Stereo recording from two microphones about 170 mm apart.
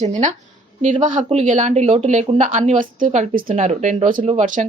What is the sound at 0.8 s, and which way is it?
A woman's voice, 45° right (ahead or behind).